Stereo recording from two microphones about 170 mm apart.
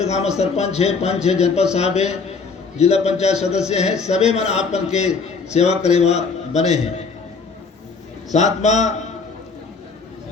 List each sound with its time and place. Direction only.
0.0 s a man's voice: 40° left (ahead or behind)
8.3 s a man's voice: 40° left (ahead or behind)